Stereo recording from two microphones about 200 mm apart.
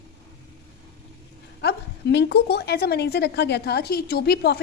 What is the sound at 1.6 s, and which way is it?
Speech, 55° left (ahead or behind).